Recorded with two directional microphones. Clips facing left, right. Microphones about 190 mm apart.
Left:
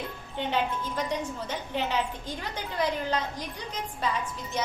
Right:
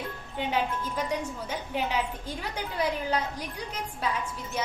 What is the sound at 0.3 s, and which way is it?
A woman's voice, 10° right (ahead or behind).